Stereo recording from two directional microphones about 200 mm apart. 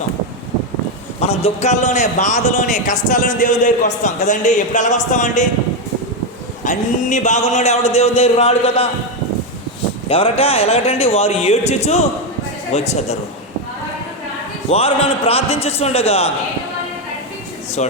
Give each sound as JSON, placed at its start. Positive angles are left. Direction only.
{"t": 1.2, "sound": "a man's voice", "side_deg": 30}
{"t": 6.7, "sound": "a man's voice", "side_deg": 40}
{"t": 10.1, "sound": "a man's voice", "side_deg": 30}
{"t": 14.7, "sound": "a man's voice", "side_deg": 30}
{"t": 17.8, "sound": "speech", "side_deg": 35}